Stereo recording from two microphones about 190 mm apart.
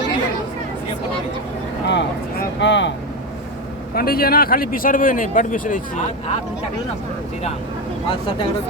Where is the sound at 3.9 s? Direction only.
50° left (ahead or behind).